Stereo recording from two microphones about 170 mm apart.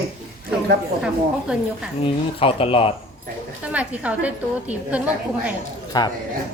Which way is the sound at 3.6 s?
10° right (ahead or behind).